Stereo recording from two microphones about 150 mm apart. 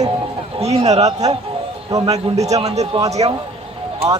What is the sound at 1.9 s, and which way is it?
Speech, 25° right (ahead or behind).